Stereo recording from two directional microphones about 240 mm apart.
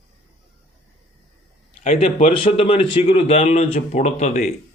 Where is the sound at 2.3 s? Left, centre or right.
Left.